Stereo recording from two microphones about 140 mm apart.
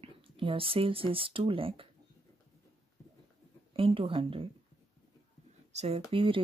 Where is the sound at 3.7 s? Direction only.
40° right (ahead or behind).